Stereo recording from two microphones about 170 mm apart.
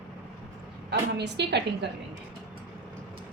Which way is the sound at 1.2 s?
80° right.